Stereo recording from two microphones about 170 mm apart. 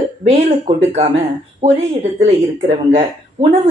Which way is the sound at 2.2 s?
40° right (ahead or behind).